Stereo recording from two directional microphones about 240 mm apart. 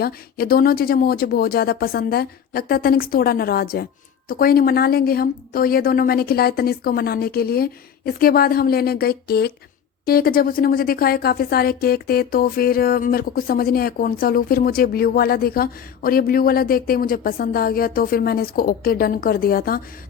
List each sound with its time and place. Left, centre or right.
0.0 s a woman's voice: left